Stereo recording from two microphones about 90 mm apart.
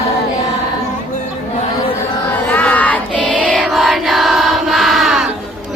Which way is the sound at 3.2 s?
10° left (ahead or behind).